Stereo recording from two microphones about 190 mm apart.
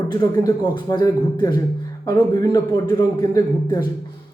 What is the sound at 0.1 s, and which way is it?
A man's voice, 20° left (ahead or behind).